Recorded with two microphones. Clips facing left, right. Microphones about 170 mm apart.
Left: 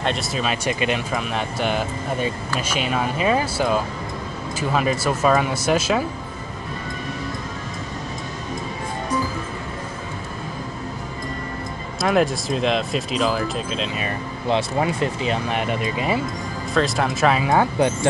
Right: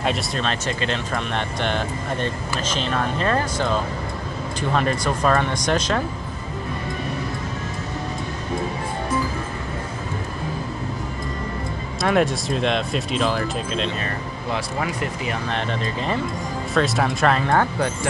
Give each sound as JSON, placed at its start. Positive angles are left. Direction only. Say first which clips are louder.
{"t": 0.0, "sound": "speech", "louder": "even", "side_deg": 0}
{"t": 12.0, "sound": "speech", "louder": "even", "side_deg": 0}
{"t": 14.0, "sound": "speech", "louder": "left 3 dB", "side_deg": 25}
{"t": 15.4, "sound": "speech", "louder": "left 2 dB", "side_deg": 10}
{"t": 16.7, "sound": "speech", "louder": "even", "side_deg": 0}